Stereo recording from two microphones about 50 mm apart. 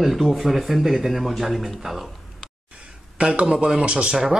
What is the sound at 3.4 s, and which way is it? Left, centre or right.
Speech, centre.